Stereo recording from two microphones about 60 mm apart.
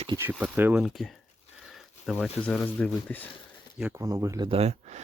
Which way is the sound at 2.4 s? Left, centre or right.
Centre.